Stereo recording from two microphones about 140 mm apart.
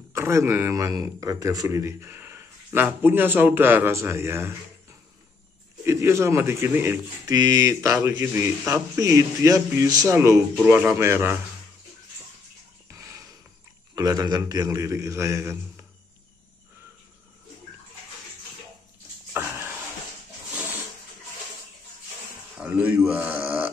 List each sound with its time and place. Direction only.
0.1 s speech: 20° right (ahead or behind)
5.9 s a man's voice: 20° right (ahead or behind)
12.9 s music: 20° right (ahead or behind)
13.9 s a man's voice: 25° right (ahead or behind)
19.3 s a sound: 15° right (ahead or behind)
22.6 s speech: 10° right (ahead or behind)